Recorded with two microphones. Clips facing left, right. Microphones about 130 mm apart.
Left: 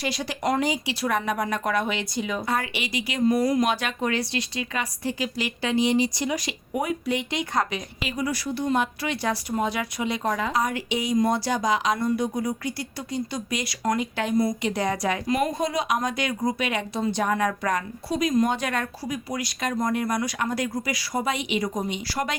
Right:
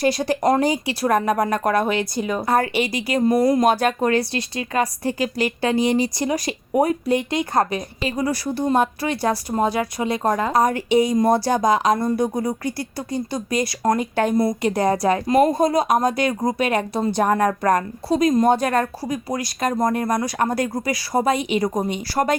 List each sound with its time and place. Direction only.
0.0 s speech: 45° right (ahead or behind)
12.6 s speech: 50° right (ahead or behind)